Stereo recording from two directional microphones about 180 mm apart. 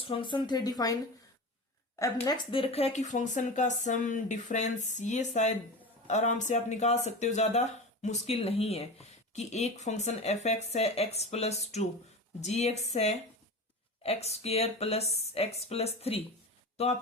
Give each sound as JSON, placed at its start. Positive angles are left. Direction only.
{"t": 0.0, "sound": "speech", "side_deg": 30}
{"t": 2.0, "sound": "speech", "side_deg": 20}